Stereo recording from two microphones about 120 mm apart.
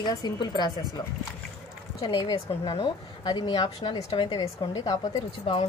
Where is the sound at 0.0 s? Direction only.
35° left (ahead or behind).